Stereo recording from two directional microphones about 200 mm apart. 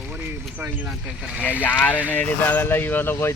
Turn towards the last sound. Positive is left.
turn(degrees=10)  # may be behind; listen again after turning